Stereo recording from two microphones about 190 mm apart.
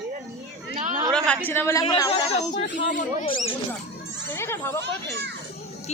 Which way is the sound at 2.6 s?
65° left (ahead or behind).